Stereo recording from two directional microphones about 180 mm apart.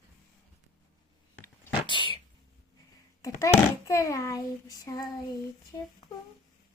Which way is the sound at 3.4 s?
15° left (ahead or behind).